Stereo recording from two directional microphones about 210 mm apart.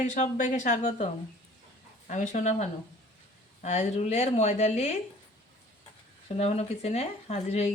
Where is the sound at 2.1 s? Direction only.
35° left (ahead or behind).